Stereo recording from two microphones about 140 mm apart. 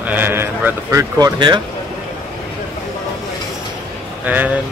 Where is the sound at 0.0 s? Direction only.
15° right (ahead or behind); by 1.6 s 30° right (ahead or behind).